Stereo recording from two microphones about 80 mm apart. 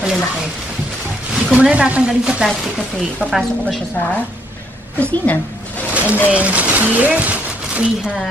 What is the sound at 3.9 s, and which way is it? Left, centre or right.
A woman's voice, left.